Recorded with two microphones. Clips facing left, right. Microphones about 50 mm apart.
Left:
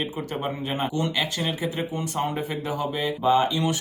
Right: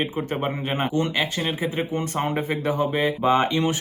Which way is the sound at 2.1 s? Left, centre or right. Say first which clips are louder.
Right 2 dB; right.